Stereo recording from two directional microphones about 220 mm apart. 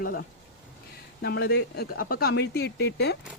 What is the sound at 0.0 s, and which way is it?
Speech, 40° left (ahead or behind).